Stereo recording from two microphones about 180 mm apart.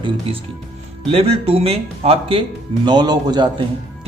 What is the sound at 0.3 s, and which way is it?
Speech, 30° right (ahead or behind).